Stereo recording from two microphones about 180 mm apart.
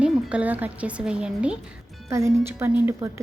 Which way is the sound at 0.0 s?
5° right (ahead or behind).